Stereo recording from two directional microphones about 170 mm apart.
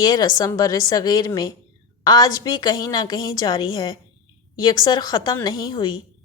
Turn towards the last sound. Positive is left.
turn(degrees=25)  # may be behind; listen again after turning